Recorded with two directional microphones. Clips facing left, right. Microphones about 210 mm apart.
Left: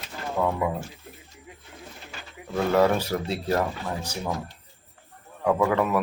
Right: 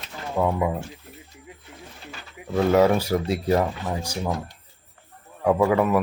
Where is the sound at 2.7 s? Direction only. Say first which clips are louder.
Right 2 dB; 10° right (ahead or behind).